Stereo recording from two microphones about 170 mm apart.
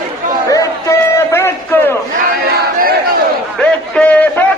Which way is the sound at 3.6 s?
5° left (ahead or behind).